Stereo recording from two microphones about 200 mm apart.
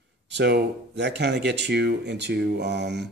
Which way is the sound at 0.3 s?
55° right (ahead or behind).